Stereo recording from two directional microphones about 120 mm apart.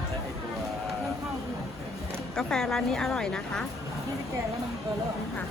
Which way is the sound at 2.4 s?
5° left (ahead or behind).